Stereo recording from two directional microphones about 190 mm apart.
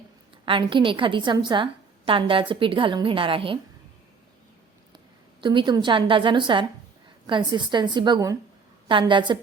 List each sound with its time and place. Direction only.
0.4 s a woman's voice: 25° right (ahead or behind)
5.4 s a woman's voice: 25° right (ahead or behind)